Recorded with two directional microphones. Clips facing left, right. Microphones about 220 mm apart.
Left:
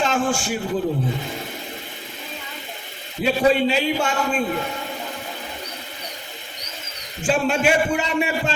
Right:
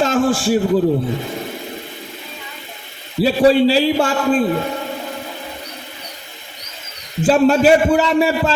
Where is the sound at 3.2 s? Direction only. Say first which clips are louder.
Right 6 dB; 35° right (ahead or behind).